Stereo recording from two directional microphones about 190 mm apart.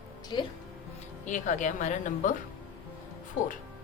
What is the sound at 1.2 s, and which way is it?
A woman's voice, 40° left (ahead or behind).